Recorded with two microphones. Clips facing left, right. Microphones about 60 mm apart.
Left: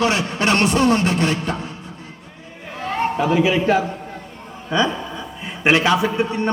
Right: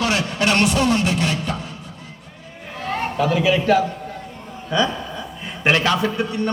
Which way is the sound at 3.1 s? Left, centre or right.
Left.